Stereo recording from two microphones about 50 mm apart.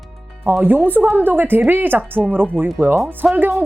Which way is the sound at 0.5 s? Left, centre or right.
Right.